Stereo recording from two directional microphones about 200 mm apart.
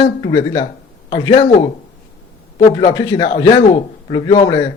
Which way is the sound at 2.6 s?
20° left (ahead or behind).